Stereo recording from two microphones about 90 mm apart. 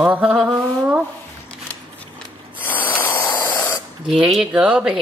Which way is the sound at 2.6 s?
20° left (ahead or behind).